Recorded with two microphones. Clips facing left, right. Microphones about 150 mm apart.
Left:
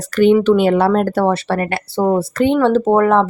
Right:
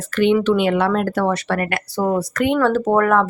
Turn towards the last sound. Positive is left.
turn(degrees=25)  # may be behind; listen again after turning